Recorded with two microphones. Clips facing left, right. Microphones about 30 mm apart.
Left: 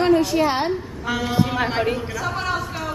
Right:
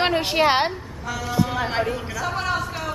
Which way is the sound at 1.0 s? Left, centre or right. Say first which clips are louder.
Left 2 dB; left.